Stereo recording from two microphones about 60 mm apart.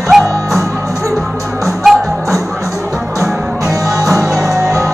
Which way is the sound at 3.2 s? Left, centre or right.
Right.